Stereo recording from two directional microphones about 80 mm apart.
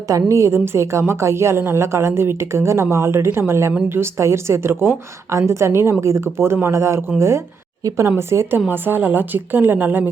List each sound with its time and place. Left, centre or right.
0.3 s a woman's voice: right